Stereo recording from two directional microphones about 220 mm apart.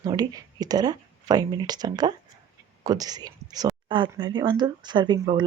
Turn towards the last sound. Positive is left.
turn(degrees=-20)  # may be behind; listen again after turning